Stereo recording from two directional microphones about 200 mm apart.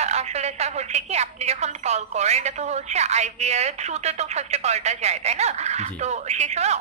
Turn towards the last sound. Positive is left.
turn(degrees=-35)  # may be behind; listen again after turning